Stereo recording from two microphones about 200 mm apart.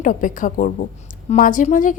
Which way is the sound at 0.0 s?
40° left (ahead or behind).